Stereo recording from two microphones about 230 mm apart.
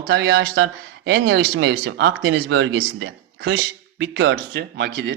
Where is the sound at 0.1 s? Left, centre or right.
Right.